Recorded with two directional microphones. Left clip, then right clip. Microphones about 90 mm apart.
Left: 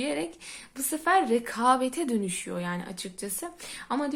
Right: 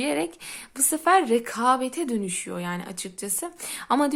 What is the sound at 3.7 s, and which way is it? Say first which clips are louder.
Speech: right 8 dB; 75° right (ahead or behind).